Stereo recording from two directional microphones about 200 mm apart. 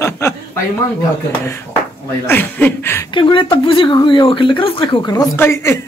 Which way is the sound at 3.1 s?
25° left (ahead or behind).